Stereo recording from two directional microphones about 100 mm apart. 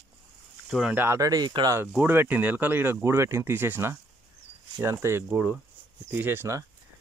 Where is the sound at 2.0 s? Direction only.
20° right (ahead or behind).